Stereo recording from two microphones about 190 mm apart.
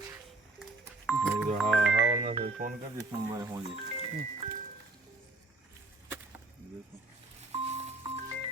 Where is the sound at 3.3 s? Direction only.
20° right (ahead or behind).